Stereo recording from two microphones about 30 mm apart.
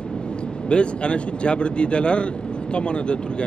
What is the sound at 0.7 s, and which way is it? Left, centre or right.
Speech, left.